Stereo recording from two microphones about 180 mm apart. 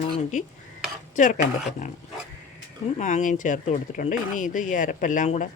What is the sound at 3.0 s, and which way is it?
Speech, 45° left (ahead or behind).